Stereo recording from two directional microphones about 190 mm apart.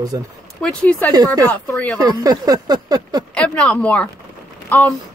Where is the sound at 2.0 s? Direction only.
20° right (ahead or behind).